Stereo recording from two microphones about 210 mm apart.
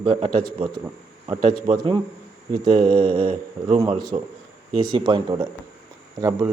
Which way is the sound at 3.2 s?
40° right (ahead or behind).